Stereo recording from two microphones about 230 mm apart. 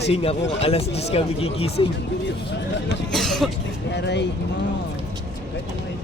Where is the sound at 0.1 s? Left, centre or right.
Left.